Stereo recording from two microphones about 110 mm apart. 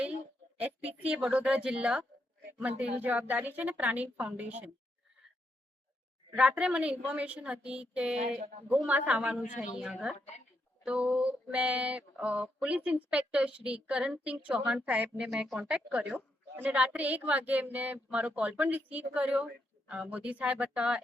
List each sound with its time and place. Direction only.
0.5 s a sound: 10° right (ahead or behind)
1.0 s speech: 10° right (ahead or behind)
6.6 s a woman's voice: 10° right (ahead or behind)
10.2 s speech: 90° left
10.8 s speech: 10° right (ahead or behind)